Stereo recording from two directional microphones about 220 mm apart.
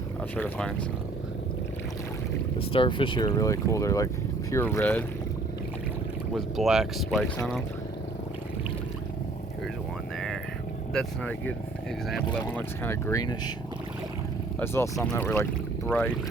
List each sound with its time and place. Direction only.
0.3 s speech: 5° left (ahead or behind)
2.6 s speech: 25° left (ahead or behind); by 5.0 s 5° left (ahead or behind)
6.3 s speech: centre (ahead or behind)
10.9 s speech: 5° left (ahead or behind)
14.6 s speech: 10° left (ahead or behind)